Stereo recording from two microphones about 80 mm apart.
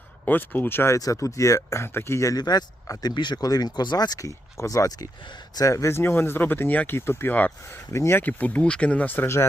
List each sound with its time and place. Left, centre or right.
0.3 s speech: left
0.9 s speech: left
2.4 s speech: left
3.2 s speech: left
3.4 s speech: left
7.9 s speech: left
8.2 s speech: left